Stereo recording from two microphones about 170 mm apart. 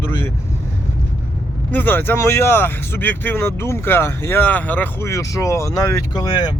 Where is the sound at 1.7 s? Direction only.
10° left (ahead or behind).